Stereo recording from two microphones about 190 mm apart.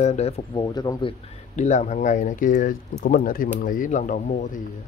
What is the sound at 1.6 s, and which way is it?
Speech, 40° left (ahead or behind).